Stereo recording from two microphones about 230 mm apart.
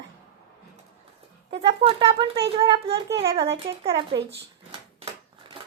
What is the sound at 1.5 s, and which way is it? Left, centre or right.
Speech, right.